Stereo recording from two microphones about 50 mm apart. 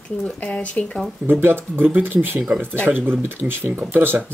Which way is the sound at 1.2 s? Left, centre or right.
Right.